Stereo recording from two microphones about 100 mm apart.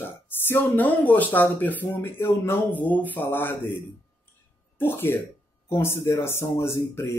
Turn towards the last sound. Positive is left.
turn(degrees=25)  # may be behind; listen again after turning